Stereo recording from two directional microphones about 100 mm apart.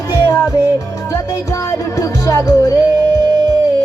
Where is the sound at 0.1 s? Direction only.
30° left (ahead or behind).